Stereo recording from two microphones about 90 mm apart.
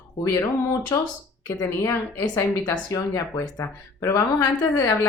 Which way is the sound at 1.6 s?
30° left (ahead or behind).